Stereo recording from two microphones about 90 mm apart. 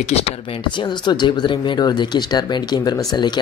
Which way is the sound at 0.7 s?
60° left (ahead or behind).